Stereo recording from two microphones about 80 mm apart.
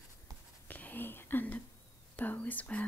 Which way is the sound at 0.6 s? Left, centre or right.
Left.